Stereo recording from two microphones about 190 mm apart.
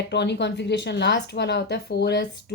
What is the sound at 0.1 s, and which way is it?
Speech, 65° left (ahead or behind).